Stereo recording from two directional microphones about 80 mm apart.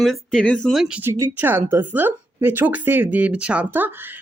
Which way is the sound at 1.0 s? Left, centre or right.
Right.